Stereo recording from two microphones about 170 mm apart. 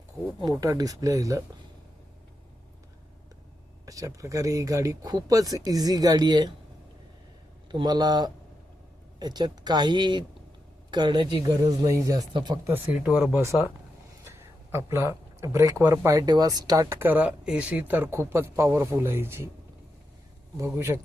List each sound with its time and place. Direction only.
0.6 s speech: 20° right (ahead or behind)
3.8 s speech: 20° right (ahead or behind)
7.7 s speech: 25° right (ahead or behind)
13.0 s speech: 5° right (ahead or behind)
14.3 s speech: 15° right (ahead or behind)
20.6 s speech: 15° right (ahead or behind)